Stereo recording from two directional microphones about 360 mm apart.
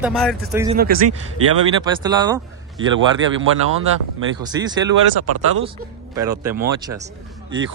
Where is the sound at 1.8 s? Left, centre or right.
Centre.